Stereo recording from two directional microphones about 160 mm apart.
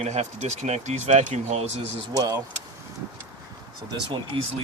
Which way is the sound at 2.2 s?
25° right (ahead or behind).